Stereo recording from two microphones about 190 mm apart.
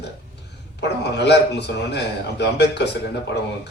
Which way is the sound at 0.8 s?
65° left (ahead or behind).